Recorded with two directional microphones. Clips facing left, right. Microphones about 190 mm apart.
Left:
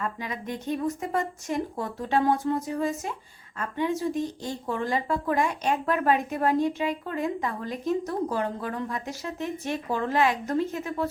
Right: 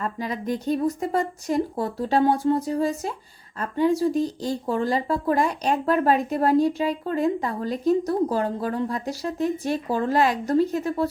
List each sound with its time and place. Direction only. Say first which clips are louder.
0.0 s speech: right 4 dB; 35° right (ahead or behind)